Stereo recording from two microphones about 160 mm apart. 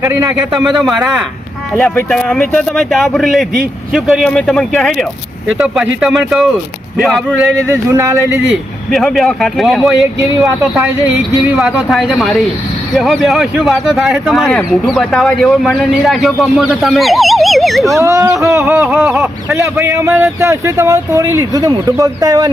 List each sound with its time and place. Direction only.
0.0 s speech: 15° right (ahead or behind)
0.5 s speech: centre (ahead or behind)
7.5 s speech: 15° right (ahead or behind)
8.9 s speech: centre (ahead or behind)
11.4 s speech: 5° right (ahead or behind)
18.0 s speech: 20° right (ahead or behind)
18.7 s speech: 5° right (ahead or behind)
18.9 s speech: 15° right (ahead or behind)